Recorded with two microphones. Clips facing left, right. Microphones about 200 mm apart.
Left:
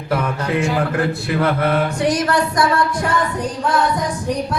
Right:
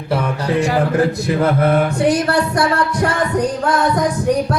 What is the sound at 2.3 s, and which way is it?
Music, 70° right (ahead or behind).